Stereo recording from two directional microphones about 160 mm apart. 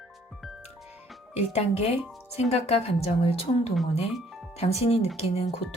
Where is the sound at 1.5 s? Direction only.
40° left (ahead or behind).